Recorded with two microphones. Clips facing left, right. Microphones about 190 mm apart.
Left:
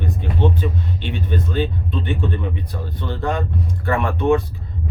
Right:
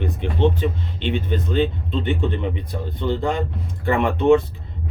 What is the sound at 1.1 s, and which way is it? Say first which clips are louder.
Speech: right 2 dB; 20° right (ahead or behind).